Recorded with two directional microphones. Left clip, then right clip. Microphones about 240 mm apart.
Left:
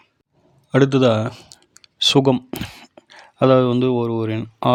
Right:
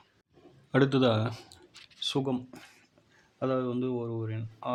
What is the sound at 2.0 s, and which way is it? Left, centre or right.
Speech, left.